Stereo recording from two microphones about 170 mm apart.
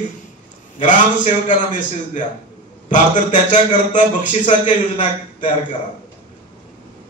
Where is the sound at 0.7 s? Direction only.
50° left (ahead or behind).